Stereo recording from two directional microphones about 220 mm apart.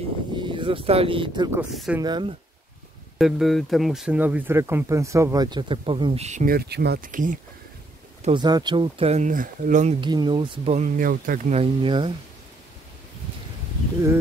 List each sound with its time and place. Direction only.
0.4 s speech: 20° right (ahead or behind)
1.6 s speech: 5° right (ahead or behind)
2.0 s speech: 20° right (ahead or behind)
3.2 s speech: centre (ahead or behind); by 7.3 s 35° right (ahead or behind)
8.2 s speech: 20° right (ahead or behind)
9.9 s speech: 20° right (ahead or behind)